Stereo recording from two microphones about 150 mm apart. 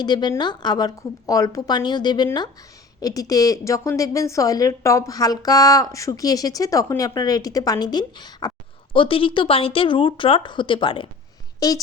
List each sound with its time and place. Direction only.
0.0 s a woman's voice: 30° left (ahead or behind)